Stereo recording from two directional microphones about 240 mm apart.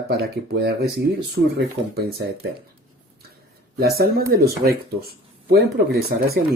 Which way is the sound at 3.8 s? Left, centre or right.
Right.